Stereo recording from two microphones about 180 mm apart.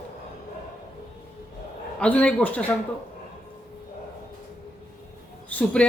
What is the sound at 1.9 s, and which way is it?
Speech, 5° left (ahead or behind).